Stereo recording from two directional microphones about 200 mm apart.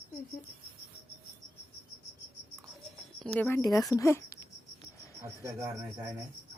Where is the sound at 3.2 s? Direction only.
5° left (ahead or behind).